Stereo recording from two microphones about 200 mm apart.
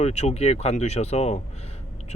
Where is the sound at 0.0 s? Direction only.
35° left (ahead or behind).